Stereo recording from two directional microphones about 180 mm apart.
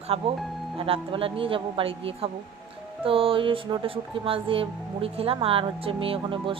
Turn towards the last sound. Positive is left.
turn(degrees=-30)  # may be behind; listen again after turning